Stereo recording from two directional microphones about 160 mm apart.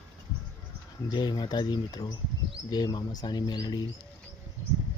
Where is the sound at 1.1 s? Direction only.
25° left (ahead or behind).